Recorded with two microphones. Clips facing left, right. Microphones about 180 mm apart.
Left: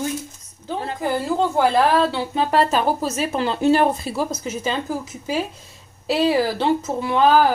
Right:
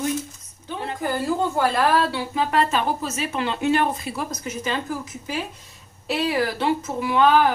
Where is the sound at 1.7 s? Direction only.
25° left (ahead or behind).